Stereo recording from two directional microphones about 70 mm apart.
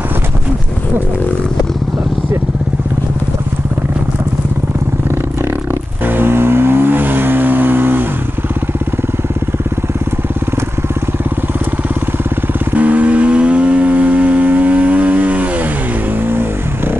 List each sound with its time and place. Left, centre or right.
6.0 s vehicle: right
12.7 s vehicle: right
16.3 s vehicle: right